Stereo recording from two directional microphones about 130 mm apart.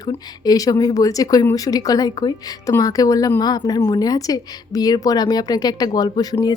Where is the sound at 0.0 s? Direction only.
30° left (ahead or behind).